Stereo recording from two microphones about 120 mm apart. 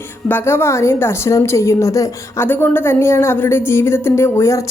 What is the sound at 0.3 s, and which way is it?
A woman's voice, 20° left (ahead or behind).